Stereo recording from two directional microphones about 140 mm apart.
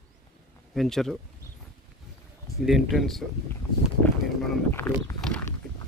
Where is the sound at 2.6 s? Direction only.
Centre (ahead or behind).